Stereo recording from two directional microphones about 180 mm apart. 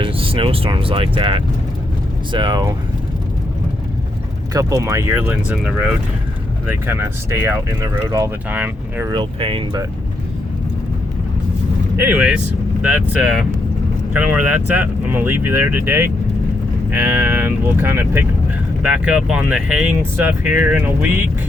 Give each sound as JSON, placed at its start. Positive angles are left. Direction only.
{"t": 0.0, "sound": "speech", "side_deg": -30}
{"t": 4.5, "sound": "speech", "side_deg": -20}
{"t": 9.0, "sound": "speech", "side_deg": -30}
{"t": 11.9, "sound": "speech", "side_deg": -10}